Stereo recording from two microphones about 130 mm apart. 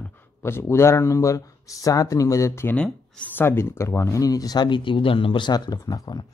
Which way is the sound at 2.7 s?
10° left (ahead or behind).